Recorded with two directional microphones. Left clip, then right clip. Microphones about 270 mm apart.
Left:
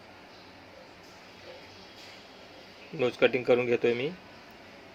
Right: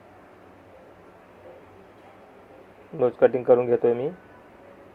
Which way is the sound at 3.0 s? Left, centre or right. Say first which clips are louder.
Right 6 dB; left.